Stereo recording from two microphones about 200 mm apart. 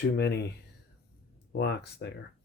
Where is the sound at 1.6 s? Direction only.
55° left (ahead or behind).